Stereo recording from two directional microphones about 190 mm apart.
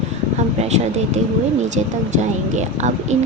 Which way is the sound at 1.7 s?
40° right (ahead or behind).